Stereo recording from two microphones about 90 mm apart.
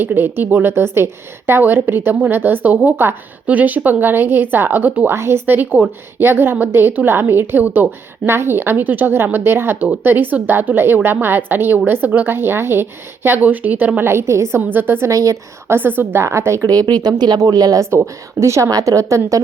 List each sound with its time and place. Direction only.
0.0 s a woman's voice: 25° right (ahead or behind)
16.6 s speech: 45° right (ahead or behind)
17.9 s a woman's voice: 35° right (ahead or behind)